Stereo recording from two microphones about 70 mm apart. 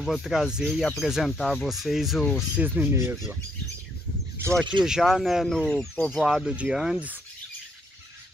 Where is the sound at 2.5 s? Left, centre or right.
Right.